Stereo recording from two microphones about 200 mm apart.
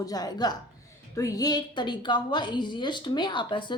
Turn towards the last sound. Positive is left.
turn(degrees=25)  # may be behind; listen again after turning